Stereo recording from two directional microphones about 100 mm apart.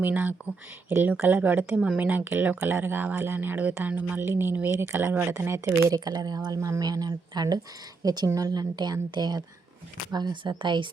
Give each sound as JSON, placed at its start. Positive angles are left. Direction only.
{"t": 0.0, "sound": "a woman's voice", "side_deg": -15}